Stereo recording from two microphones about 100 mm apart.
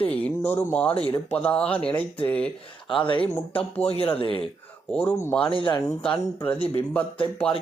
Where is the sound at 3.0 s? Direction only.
55° left (ahead or behind).